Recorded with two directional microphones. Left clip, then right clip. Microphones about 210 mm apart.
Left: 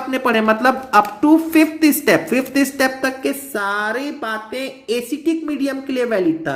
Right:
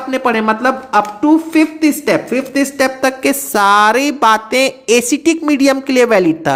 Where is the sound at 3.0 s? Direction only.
35° right (ahead or behind).